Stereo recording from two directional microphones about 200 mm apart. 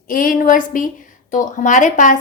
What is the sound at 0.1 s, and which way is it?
A woman's voice, 45° left (ahead or behind).